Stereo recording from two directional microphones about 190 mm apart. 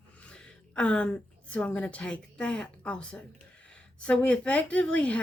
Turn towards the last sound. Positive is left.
turn(degrees=5)  # may be behind; listen again after turning